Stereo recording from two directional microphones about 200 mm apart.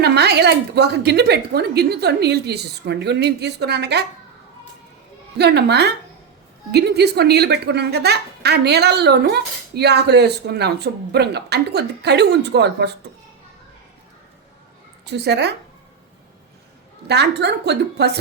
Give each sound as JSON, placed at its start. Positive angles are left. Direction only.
{"t": 0.0, "sound": "speech", "side_deg": -55}
{"t": 5.4, "sound": "speech", "side_deg": -55}
{"t": 15.0, "sound": "speech", "side_deg": -55}
{"t": 17.1, "sound": "speech", "side_deg": -55}